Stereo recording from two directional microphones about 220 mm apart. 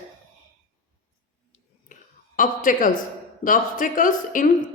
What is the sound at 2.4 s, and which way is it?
A woman's voice, 35° left (ahead or behind).